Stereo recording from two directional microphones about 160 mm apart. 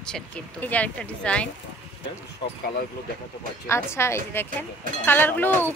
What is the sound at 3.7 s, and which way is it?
Speech, 15° left (ahead or behind).